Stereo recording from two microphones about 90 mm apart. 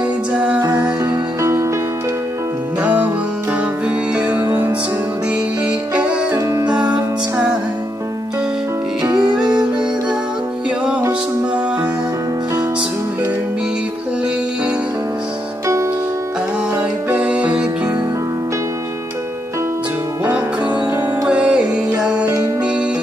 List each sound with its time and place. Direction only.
0.3 s music: 15° right (ahead or behind)
0.6 s music: 45° right (ahead or behind)
1.4 s music: 35° right (ahead or behind)
2.8 s music: 15° right (ahead or behind)
4.1 s music: 15° right (ahead or behind)
5.7 s music: 10° right (ahead or behind)
9.0 s music: 45° right (ahead or behind)
10.9 s music: 15° right (ahead or behind)
16.7 s music: 15° right (ahead or behind)
21.3 s music: 10° right (ahead or behind)